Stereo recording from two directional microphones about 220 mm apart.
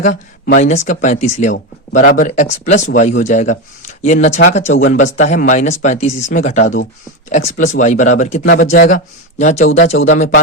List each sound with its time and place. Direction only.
0.0 s speech: 35° left (ahead or behind)